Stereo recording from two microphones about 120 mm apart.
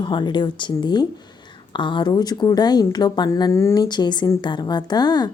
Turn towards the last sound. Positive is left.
turn(degrees=35)  # may be behind; listen again after turning